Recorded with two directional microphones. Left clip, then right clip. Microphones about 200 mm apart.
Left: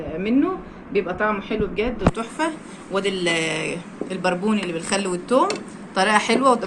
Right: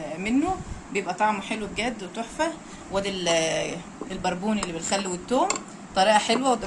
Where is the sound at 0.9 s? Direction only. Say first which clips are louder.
Left 3 dB; 50° right (ahead or behind).